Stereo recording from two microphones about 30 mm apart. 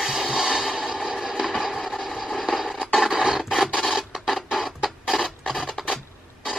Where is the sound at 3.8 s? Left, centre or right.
Centre.